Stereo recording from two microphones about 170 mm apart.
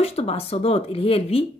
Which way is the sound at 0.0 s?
35° left (ahead or behind).